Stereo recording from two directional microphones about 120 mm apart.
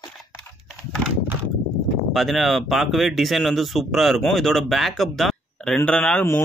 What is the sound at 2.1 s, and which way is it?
Speech, centre (ahead or behind).